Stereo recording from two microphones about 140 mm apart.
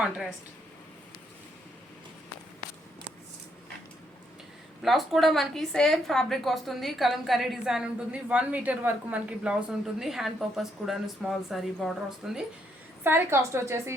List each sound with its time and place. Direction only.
4.8 s a woman's voice: centre (ahead or behind)
13.1 s a woman's voice: 15° right (ahead or behind)